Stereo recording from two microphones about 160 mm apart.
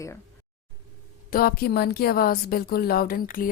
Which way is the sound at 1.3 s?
65° left (ahead or behind).